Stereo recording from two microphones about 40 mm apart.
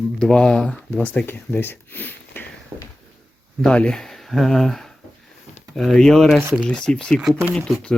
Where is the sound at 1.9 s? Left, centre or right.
Left.